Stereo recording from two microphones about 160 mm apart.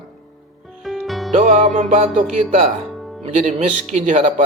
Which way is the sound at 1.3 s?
50° right (ahead or behind).